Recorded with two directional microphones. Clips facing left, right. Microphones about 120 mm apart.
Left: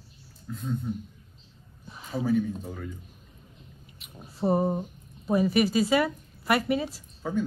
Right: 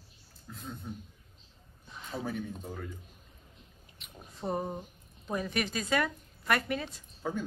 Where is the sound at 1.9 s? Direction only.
5° left (ahead or behind).